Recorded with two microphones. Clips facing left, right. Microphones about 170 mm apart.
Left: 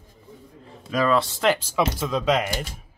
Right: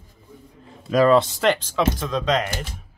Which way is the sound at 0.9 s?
40° right (ahead or behind).